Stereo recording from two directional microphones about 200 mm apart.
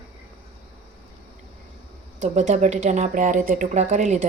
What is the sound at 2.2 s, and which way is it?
Speech, 35° right (ahead or behind).